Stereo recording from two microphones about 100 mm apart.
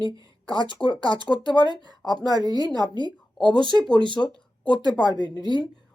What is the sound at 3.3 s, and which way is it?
Speech, 5° left (ahead or behind).